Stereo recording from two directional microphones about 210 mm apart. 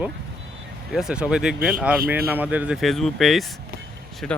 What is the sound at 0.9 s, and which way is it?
Speech, 5° right (ahead or behind).